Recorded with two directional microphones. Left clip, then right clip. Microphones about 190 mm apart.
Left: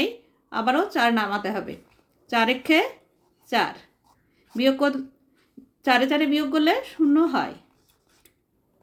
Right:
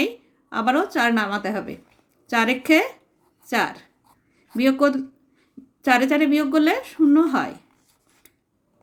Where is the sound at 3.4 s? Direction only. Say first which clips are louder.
Right 1 dB; 20° right (ahead or behind).